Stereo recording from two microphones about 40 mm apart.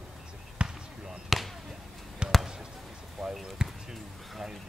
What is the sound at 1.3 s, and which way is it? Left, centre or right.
Basketball bounce, centre.